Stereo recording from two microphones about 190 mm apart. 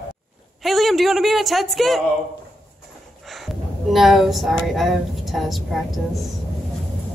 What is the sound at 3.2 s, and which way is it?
Speech, centre (ahead or behind).